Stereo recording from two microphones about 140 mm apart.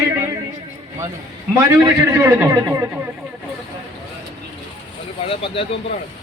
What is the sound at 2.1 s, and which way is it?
Speech, 20° right (ahead or behind).